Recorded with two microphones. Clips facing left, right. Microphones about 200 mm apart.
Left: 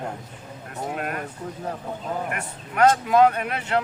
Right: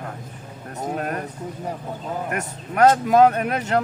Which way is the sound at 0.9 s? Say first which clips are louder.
Right 4 dB; 40° right (ahead or behind).